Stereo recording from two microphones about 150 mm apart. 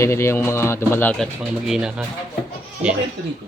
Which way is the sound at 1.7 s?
5° right (ahead or behind).